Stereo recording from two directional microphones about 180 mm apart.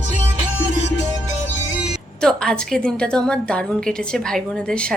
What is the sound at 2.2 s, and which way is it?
A woman's voice, 5° left (ahead or behind).